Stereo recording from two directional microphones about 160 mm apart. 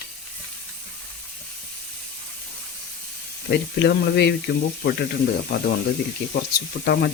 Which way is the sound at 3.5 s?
90° left.